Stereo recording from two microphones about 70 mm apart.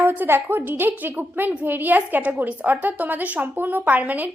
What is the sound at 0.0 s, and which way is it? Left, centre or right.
A woman's voice, right.